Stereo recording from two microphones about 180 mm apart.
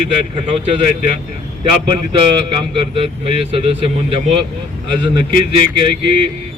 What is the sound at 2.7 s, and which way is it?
A man's voice, 30° right (ahead or behind).